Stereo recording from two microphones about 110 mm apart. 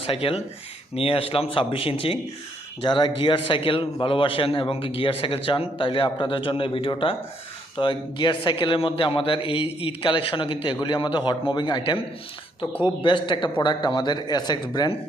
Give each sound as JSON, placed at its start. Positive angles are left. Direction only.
{"t": 0.0, "sound": "a man's voice", "side_deg": 60}
{"t": 2.8, "sound": "a man's voice", "side_deg": 45}